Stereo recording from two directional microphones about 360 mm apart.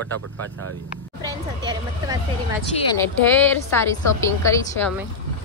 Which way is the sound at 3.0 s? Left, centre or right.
Centre.